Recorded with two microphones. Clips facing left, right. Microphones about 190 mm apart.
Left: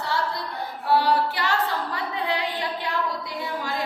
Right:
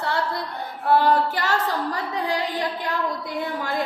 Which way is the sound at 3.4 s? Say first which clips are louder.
Right 4 dB; 55° right (ahead or behind).